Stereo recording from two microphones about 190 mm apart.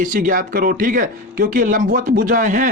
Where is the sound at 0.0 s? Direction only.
45° right (ahead or behind).